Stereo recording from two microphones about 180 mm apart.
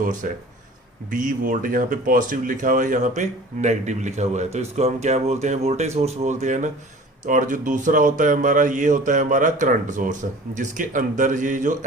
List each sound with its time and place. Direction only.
0.0 s a man's voice: 45° right (ahead or behind)